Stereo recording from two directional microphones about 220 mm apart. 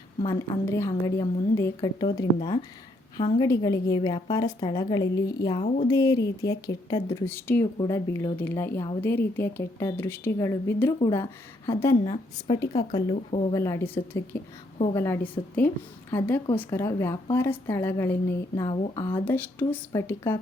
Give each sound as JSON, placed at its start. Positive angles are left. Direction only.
{"t": 0.3, "sound": "a woman's voice", "side_deg": 15}
{"t": 19.2, "sound": "a woman's voice", "side_deg": 10}